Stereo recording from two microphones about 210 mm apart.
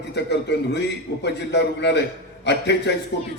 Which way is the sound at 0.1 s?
55° left (ahead or behind).